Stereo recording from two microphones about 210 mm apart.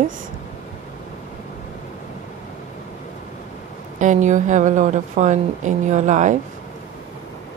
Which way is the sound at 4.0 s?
35° right (ahead or behind).